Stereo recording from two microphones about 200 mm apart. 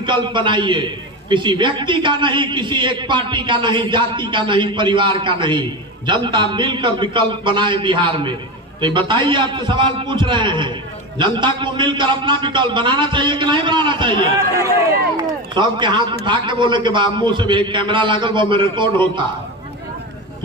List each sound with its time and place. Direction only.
0.0 s a man's voice: 25° right (ahead or behind)